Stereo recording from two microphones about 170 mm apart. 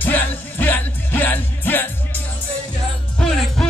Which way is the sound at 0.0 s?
10° left (ahead or behind).